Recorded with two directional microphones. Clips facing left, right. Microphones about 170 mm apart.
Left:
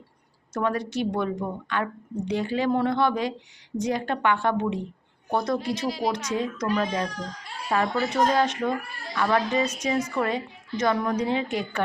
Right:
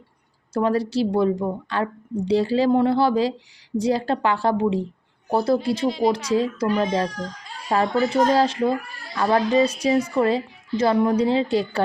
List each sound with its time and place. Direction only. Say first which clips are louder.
0.5 s a woman's voice: right 5 dB; 30° right (ahead or behind)
5.8 s a woman's voice: right 6 dB; centre (ahead or behind)
6.3 s speech: right 5 dB; 30° right (ahead or behind)